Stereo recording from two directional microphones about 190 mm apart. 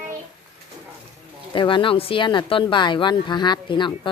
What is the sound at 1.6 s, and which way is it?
Speech, 25° left (ahead or behind).